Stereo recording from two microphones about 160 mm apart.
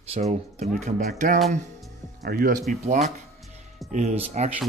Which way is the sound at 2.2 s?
65° right (ahead or behind).